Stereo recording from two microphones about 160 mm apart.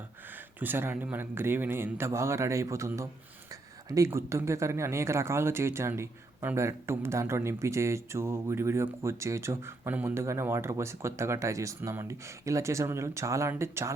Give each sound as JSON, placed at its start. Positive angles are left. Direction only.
{"t": 0.3, "sound": "speech", "side_deg": -10}